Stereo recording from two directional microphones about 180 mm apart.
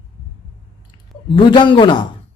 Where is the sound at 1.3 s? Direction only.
25° left (ahead or behind).